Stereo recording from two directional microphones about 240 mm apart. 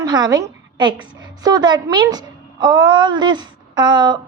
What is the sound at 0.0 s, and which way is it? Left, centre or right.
A woman's voice, centre.